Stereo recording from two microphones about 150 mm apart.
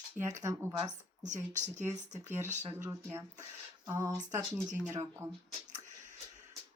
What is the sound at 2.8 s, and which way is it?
Speech, 15° right (ahead or behind).